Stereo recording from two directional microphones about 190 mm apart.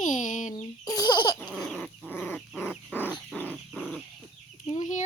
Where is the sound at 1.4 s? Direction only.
Centre (ahead or behind).